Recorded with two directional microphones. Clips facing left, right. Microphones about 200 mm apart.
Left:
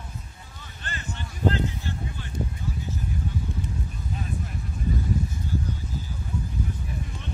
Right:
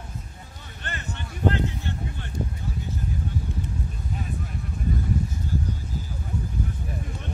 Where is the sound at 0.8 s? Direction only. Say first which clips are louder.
Right 1 dB; 60° right (ahead or behind).